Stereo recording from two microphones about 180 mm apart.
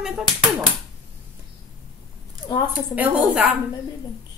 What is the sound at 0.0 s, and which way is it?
Speech, 5° right (ahead or behind).